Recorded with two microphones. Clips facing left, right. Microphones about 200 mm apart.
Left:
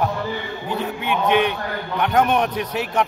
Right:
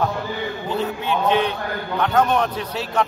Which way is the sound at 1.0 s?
15° left (ahead or behind).